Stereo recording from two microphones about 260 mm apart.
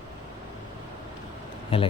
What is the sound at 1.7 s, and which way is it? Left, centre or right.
Speech, left.